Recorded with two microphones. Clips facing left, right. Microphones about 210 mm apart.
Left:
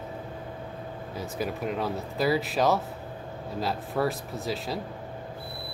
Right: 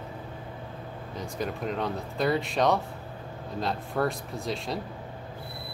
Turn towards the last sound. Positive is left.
turn(degrees=0)  # may be behind; listen again after turning